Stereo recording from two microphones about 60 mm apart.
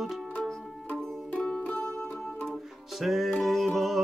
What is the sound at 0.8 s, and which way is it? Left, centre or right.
Music, left.